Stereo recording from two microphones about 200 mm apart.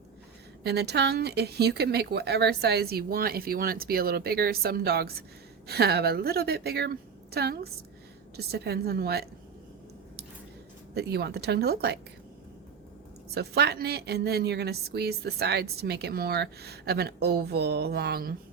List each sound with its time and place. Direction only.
0.6 s a woman's voice: 55° right (ahead or behind)
10.9 s a woman's voice: 55° right (ahead or behind)
13.3 s a woman's voice: 55° right (ahead or behind)